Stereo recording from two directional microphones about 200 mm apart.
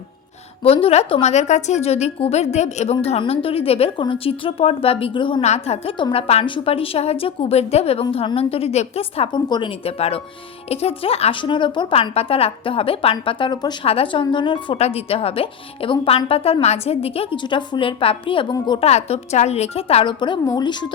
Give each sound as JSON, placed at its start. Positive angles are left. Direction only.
{"t": 0.6, "sound": "a woman's voice", "side_deg": 30}